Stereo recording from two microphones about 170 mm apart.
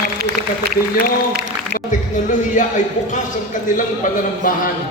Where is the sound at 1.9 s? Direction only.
50° left (ahead or behind).